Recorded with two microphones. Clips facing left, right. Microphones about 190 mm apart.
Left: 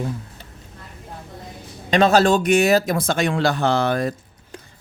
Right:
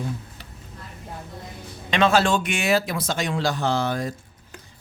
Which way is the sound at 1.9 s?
40° left (ahead or behind).